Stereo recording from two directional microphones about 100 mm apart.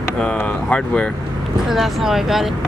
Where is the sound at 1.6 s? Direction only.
5° right (ahead or behind).